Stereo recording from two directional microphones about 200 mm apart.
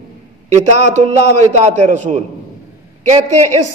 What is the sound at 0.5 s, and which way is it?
A man's voice, 35° right (ahead or behind).